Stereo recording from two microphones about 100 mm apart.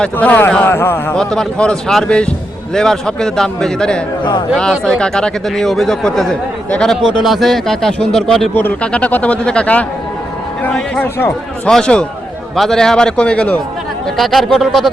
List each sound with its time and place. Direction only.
0.0 s speech: 15° left (ahead or behind)
1.1 s speech: 5° left (ahead or behind)
4.2 s speech: 50° left (ahead or behind)
4.5 s speech: 5° left (ahead or behind)
14.2 s speech: centre (ahead or behind)